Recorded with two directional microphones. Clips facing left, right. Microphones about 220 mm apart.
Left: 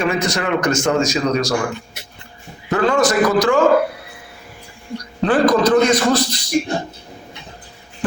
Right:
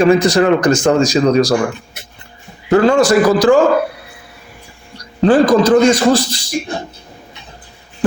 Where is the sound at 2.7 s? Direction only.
30° right (ahead or behind).